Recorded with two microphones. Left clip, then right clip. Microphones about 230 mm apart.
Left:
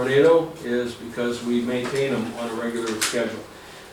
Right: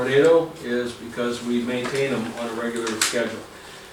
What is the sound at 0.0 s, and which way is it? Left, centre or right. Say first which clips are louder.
Speech: even; centre.